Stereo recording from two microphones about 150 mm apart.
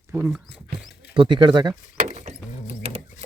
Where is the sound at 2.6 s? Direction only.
40° right (ahead or behind).